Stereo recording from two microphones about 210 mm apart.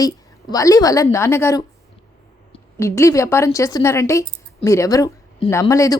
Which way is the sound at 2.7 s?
15° left (ahead or behind).